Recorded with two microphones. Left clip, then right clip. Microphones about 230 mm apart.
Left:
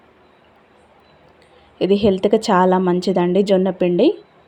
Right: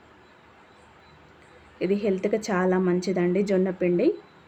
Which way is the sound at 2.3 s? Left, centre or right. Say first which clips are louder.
Left 10 dB; centre.